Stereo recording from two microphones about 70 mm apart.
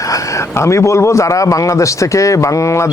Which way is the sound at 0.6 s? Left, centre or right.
Left.